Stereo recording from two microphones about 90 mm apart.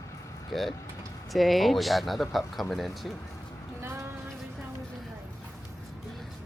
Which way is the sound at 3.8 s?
30° right (ahead or behind).